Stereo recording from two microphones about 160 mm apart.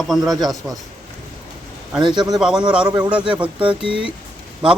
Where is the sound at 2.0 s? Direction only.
25° right (ahead or behind).